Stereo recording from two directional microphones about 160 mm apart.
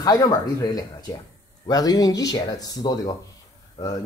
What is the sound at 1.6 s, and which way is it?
Speech, 25° left (ahead or behind).